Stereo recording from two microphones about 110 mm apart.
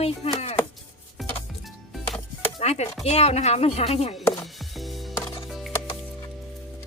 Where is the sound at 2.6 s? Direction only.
85° left.